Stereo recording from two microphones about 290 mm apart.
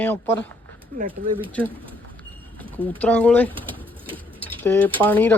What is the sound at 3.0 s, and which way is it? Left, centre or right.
Speech, centre.